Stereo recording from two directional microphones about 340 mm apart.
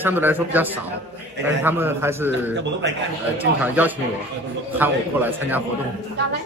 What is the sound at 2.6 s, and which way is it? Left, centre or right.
Speech, right.